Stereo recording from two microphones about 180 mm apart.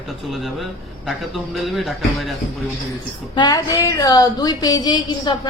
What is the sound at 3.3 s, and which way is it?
A woman's voice, 20° left (ahead or behind).